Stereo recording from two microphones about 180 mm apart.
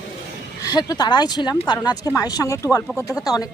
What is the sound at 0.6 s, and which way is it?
Speech, 20° left (ahead or behind).